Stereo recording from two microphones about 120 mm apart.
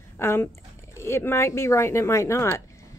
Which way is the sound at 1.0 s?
20° left (ahead or behind).